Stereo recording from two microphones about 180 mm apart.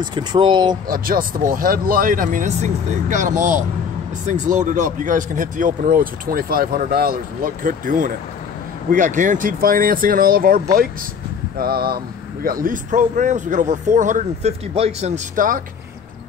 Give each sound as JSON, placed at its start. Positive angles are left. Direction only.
{"t": 0.0, "sound": "speech", "side_deg": -25}
{"t": 0.8, "sound": "speech", "side_deg": -50}